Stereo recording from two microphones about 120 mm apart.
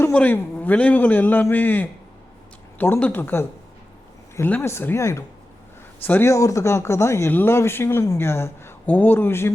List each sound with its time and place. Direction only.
0.1 s a man's voice: 15° left (ahead or behind)